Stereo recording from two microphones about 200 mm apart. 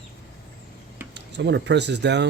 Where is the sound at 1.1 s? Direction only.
60° right (ahead or behind).